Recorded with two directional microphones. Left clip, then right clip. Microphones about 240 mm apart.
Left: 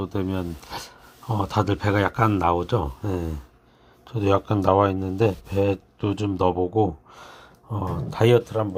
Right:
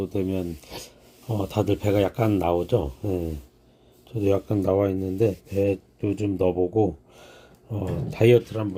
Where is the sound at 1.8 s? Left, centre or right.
Left.